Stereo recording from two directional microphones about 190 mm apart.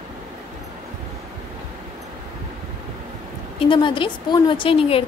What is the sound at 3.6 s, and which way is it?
A woman's voice, 25° left (ahead or behind).